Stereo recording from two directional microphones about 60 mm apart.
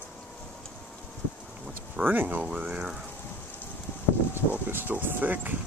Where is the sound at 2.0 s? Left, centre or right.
Right.